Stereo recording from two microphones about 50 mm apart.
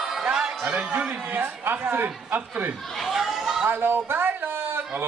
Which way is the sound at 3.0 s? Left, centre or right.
Centre.